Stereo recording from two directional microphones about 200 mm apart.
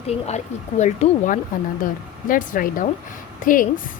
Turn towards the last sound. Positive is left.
turn(degrees=45)  # may be behind; listen again after turning